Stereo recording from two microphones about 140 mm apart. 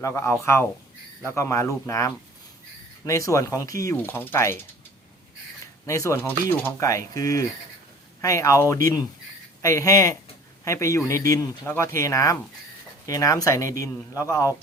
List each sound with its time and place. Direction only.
0.0 s speech: 20° left (ahead or behind)
5.8 s speech: 20° left (ahead or behind)